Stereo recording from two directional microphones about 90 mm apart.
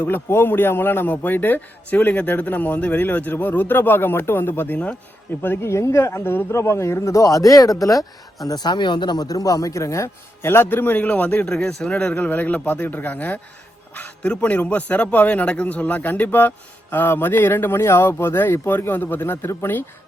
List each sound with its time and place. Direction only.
0.0 s a man's voice: 25° left (ahead or behind); by 8.0 s 40° left (ahead or behind)
8.4 s a man's voice: 50° left (ahead or behind); by 19.8 s 25° left (ahead or behind)